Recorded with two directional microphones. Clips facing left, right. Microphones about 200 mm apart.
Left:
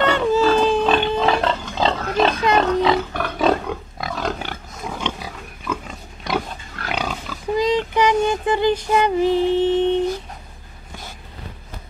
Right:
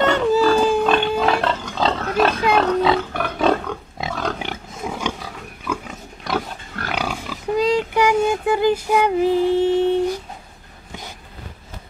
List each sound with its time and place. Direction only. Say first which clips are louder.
0.5 s pig: even; 10° right (ahead or behind)
4.0 s pig: right 3 dB; 25° right (ahead or behind)
4.4 s wild animals: right 2 dB; 10° right (ahead or behind)
5.7 s pig: right 1 dB; centre (ahead or behind)
7.0 s a sound: right 1 dB; 10° right (ahead or behind)